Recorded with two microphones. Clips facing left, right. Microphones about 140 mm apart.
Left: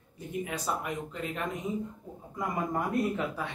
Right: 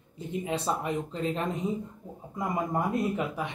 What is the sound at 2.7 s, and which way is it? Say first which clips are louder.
Speech: right 1 dB; 20° right (ahead or behind).